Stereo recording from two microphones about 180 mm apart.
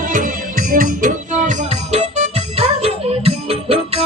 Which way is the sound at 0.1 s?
50° right (ahead or behind).